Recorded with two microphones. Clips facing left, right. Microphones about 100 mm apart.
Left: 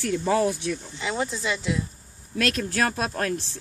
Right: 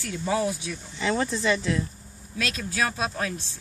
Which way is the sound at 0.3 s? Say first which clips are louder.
Left 2 dB; 50° left (ahead or behind).